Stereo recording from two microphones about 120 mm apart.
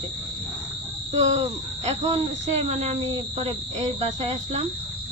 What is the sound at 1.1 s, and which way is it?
Speech, 65° right (ahead or behind).